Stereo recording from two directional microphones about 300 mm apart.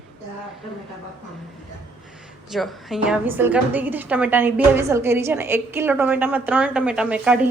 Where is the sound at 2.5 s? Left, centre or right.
Centre.